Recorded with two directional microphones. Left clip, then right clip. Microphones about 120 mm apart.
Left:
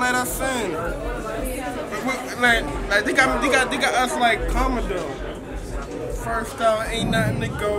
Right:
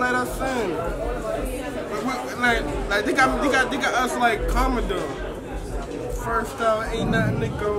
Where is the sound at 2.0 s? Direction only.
5° left (ahead or behind).